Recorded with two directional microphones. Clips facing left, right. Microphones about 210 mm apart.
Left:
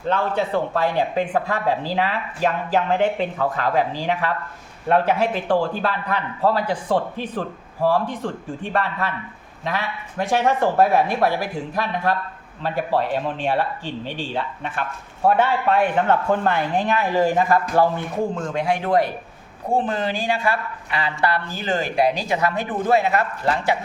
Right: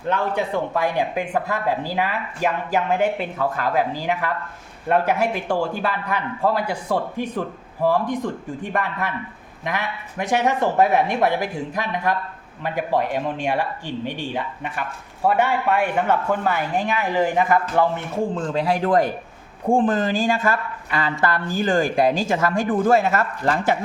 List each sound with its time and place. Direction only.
0.8 s speech: 15° right (ahead or behind)
18.5 s a man's voice: 40° right (ahead or behind)